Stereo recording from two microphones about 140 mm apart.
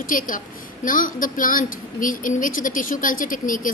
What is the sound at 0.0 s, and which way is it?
A woman's voice, 80° left.